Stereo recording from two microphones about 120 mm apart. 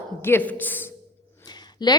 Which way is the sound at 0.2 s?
20° left (ahead or behind).